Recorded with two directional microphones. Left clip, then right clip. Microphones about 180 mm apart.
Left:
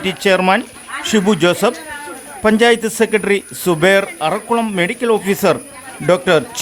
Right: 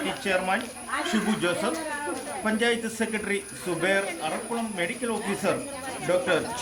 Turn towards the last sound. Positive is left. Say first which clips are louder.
# left 11 dB
turn(degrees=65)  # may be behind; listen again after turning